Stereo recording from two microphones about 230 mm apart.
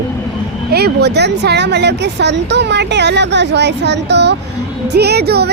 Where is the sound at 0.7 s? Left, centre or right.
Right.